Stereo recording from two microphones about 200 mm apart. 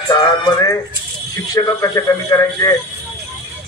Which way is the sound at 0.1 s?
20° left (ahead or behind).